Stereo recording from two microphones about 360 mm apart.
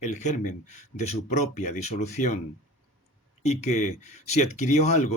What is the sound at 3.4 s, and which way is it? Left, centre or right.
Speech, centre.